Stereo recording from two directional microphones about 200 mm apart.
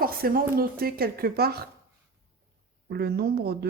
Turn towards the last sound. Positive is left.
turn(degrees=-50)  # may be behind; listen again after turning